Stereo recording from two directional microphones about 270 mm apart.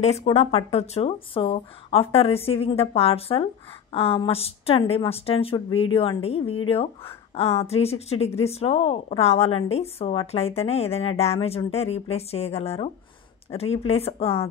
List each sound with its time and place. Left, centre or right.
0.0 s speech: left